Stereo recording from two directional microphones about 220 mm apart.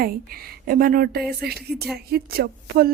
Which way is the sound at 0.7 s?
40° right (ahead or behind).